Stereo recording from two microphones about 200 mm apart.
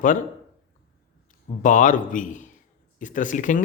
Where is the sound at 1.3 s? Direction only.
40° left (ahead or behind).